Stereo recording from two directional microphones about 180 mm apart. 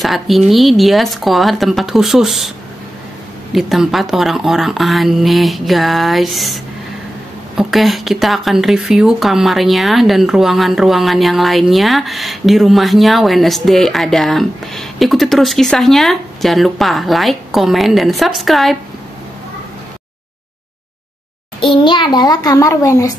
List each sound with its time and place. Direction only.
0.0 s speech: centre (ahead or behind)
3.5 s speech: centre (ahead or behind)
21.8 s a child's voice: 25° left (ahead or behind)